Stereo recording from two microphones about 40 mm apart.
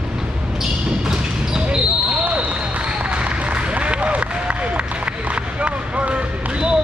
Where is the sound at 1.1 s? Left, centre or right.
Right.